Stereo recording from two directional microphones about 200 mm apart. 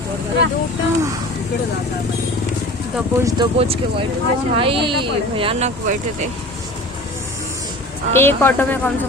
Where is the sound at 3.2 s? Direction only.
20° right (ahead or behind); by 6.2 s 35° right (ahead or behind).